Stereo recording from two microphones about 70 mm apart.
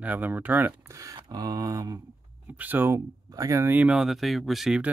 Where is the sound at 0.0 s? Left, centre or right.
Right.